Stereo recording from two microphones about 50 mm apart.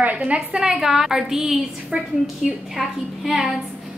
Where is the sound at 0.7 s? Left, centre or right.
Centre.